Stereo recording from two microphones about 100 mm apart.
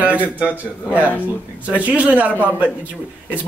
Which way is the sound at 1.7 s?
15° right (ahead or behind).